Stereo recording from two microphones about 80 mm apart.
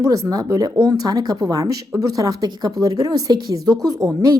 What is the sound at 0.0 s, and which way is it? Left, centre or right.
Speech, right.